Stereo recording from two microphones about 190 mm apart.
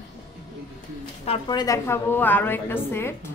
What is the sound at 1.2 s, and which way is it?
A woman's voice, 25° left (ahead or behind).